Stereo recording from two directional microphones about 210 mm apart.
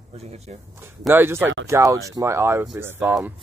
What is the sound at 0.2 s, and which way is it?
Speech, 30° right (ahead or behind).